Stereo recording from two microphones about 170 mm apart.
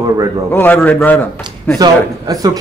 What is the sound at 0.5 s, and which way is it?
Speech, 10° left (ahead or behind).